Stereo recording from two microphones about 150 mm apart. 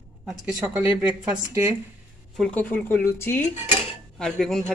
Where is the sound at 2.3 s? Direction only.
5° left (ahead or behind).